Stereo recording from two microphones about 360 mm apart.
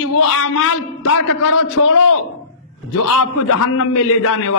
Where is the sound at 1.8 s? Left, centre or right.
Left.